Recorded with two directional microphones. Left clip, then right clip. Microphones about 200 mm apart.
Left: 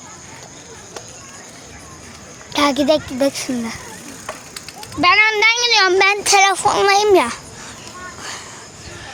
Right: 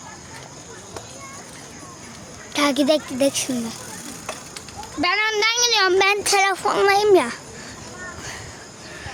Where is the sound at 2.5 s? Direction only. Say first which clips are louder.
Left 3 dB; 5° left (ahead or behind).